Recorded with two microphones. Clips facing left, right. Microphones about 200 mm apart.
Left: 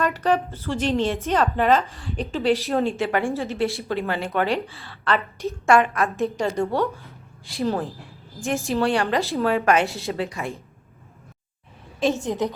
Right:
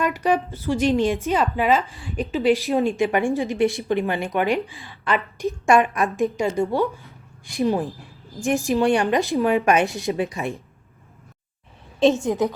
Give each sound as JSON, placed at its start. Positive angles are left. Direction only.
{"t": 0.0, "sound": "a woman's voice", "side_deg": -10}
{"t": 11.9, "sound": "a woman's voice", "side_deg": -25}
{"t": 12.2, "sound": "a woman's voice", "side_deg": -15}